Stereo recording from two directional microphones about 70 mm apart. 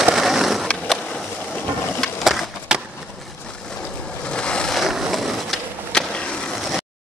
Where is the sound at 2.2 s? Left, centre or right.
Centre.